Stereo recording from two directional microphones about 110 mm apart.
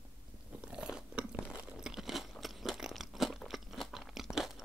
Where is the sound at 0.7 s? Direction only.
10° right (ahead or behind).